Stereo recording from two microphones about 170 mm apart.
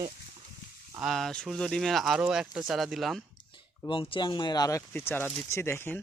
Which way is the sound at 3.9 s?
30° left (ahead or behind).